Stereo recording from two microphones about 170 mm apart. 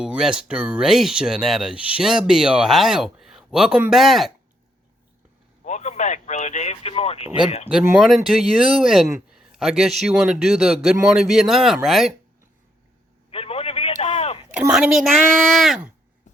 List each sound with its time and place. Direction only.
0.0 s speech: 5° right (ahead or behind)
5.6 s speech: 45° left (ahead or behind)
8.0 s speech: centre (ahead or behind)
13.3 s a sound: 35° left (ahead or behind)
14.5 s speech: 5° right (ahead or behind)